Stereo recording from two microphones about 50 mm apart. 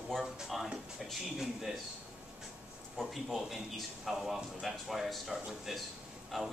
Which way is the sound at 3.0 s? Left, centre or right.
Centre.